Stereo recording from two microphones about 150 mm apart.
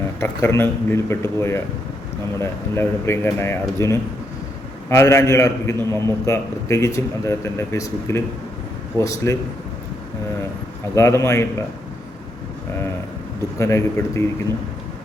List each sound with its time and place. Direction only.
0.2 s speech: 15° left (ahead or behind)
10.9 s speech: 20° left (ahead or behind)
13.6 s speech: 20° left (ahead or behind)